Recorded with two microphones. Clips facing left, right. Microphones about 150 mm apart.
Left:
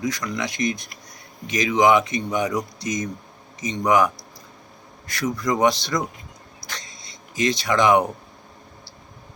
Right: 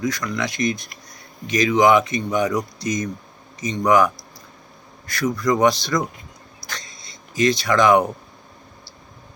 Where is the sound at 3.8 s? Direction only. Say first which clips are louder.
Right 2 dB; 20° left (ahead or behind).